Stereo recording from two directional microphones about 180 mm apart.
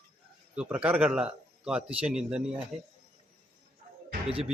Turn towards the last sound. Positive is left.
turn(degrees=-30)  # may be behind; listen again after turning